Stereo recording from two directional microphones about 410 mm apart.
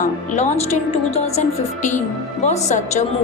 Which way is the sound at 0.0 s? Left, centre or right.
Centre.